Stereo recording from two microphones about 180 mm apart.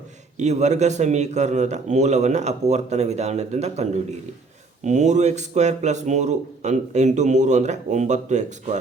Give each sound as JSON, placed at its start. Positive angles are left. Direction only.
{"t": 0.3, "sound": "a man's voice", "side_deg": -40}